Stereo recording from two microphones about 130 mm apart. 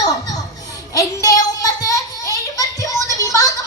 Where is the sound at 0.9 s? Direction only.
30° left (ahead or behind).